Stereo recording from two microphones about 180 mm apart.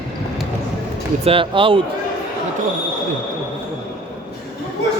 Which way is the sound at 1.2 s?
30° right (ahead or behind).